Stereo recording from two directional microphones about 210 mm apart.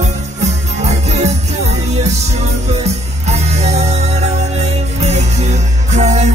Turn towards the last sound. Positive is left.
turn(degrees=-35)  # may be behind; listen again after turning